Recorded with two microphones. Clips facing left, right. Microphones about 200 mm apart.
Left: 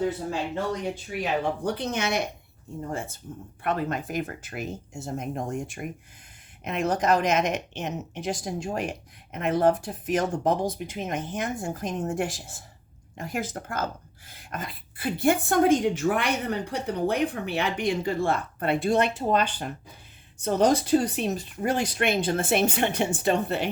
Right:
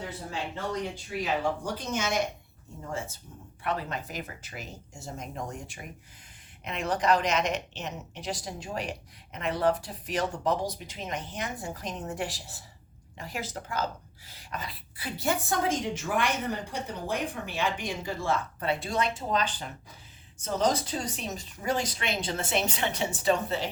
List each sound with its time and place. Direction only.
1.2 s speech: 60° left (ahead or behind)
3.6 s a woman's voice: 50° left (ahead or behind)